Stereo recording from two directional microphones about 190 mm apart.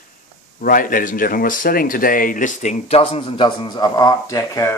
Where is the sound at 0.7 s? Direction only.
45° left (ahead or behind).